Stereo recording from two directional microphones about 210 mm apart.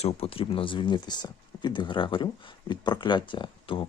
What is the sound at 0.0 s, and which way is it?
Speech, 25° left (ahead or behind).